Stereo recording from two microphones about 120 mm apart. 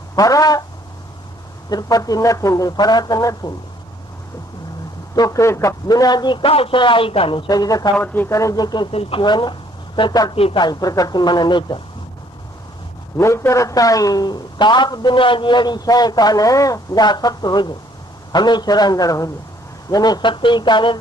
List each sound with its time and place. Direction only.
0.2 s a man's voice: 30° left (ahead or behind)
1.7 s a man's voice: 30° left (ahead or behind)
5.1 s a man's voice: 30° left (ahead or behind); by 7.4 s 50° left (ahead or behind)
7.4 s a man's voice: 35° left (ahead or behind)
7.9 s speech: 15° left (ahead or behind)
8.3 s a man's voice: 25° left (ahead or behind)
8.9 s a man's voice: 55° left (ahead or behind)
9.2 s speech: 40° left (ahead or behind)
10.3 s a man's voice: 55° left (ahead or behind)
10.6 s a man's voice: 35° left (ahead or behind)
13.1 s a man's voice: 25° left (ahead or behind); by 21.0 s 40° left (ahead or behind)